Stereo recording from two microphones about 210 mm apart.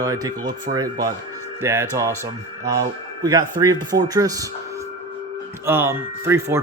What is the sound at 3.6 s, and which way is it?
Speech, 15° right (ahead or behind).